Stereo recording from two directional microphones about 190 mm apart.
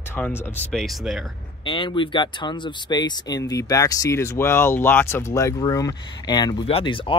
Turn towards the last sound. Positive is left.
turn(degrees=25)  # may be behind; listen again after turning